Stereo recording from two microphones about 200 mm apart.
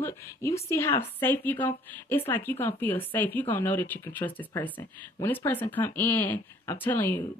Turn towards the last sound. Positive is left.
turn(degrees=10)  # may be behind; listen again after turning